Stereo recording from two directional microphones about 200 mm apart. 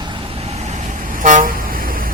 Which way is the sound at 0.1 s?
30° right (ahead or behind).